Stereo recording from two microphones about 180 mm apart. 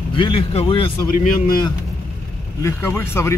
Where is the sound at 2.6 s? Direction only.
15° left (ahead or behind).